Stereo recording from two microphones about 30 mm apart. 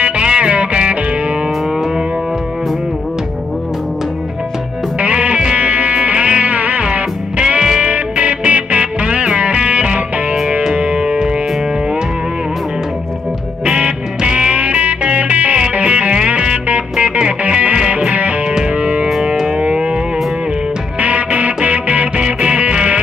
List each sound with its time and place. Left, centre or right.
0.0 s music: right
5.0 s music: right
7.8 s music: right
10.8 s music: right
13.7 s music: right
14.6 s music: right
17.5 s music: right
18.8 s music: right
21.0 s music: right
22.1 s music: right